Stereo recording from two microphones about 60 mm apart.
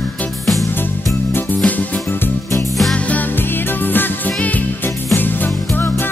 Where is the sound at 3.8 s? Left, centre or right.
Left.